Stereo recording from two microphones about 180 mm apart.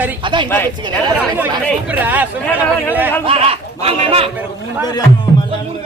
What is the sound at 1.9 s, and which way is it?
Speech, 10° right (ahead or behind).